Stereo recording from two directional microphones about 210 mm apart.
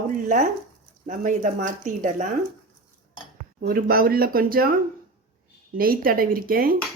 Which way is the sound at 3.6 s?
45° right (ahead or behind).